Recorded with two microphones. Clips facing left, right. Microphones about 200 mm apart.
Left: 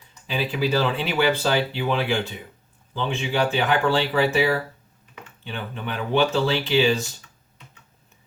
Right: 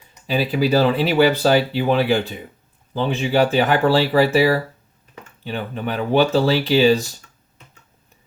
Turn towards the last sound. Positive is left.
turn(degrees=-35)  # may be behind; listen again after turning